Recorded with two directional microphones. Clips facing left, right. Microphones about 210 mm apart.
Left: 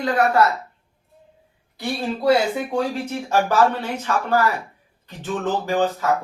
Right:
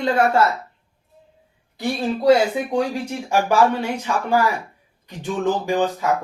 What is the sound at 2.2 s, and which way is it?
Speech, 15° right (ahead or behind).